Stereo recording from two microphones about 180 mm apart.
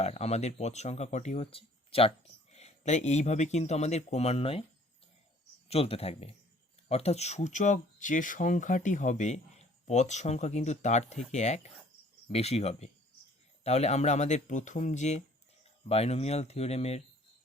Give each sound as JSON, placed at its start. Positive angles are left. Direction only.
{"t": 0.0, "sound": "speech", "side_deg": 35}
{"t": 5.6, "sound": "speech", "side_deg": 35}